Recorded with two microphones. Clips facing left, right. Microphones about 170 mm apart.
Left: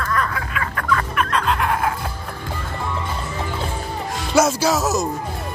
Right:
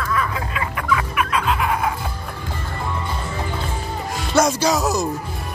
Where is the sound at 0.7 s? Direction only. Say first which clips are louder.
Even; 10° right (ahead or behind).